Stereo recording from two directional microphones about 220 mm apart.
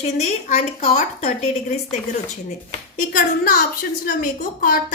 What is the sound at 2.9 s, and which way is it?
A woman's voice, 40° left (ahead or behind).